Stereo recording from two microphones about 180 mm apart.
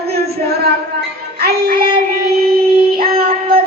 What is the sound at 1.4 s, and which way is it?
Child singing, 60° right (ahead or behind).